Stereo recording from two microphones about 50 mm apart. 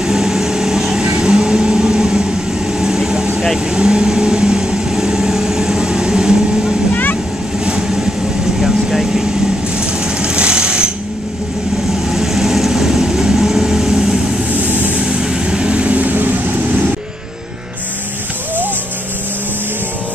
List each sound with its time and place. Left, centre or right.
0.0 s vehicle: centre
8.5 s vehicle: centre
9.8 s sewing machine: centre
12.1 s vehicle: centre
14.5 s vehicle: right
15.0 s vehicle: centre